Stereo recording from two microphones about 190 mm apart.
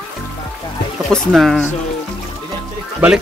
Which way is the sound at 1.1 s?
Centre (ahead or behind).